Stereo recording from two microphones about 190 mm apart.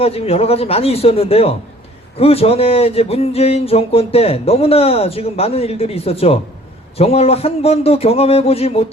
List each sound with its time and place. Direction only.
0.0 s speech: 30° left (ahead or behind)